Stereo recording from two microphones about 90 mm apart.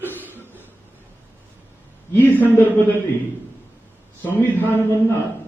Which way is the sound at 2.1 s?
20° left (ahead or behind).